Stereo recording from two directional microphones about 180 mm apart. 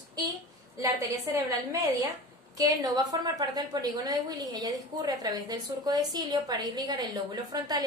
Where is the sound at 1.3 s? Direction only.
20° right (ahead or behind).